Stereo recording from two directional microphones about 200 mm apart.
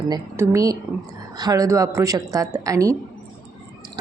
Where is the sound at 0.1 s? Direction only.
15° right (ahead or behind).